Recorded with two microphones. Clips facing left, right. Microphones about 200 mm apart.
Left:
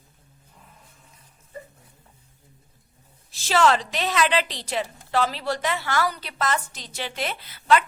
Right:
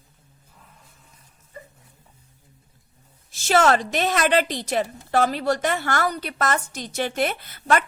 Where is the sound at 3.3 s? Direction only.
50° right (ahead or behind).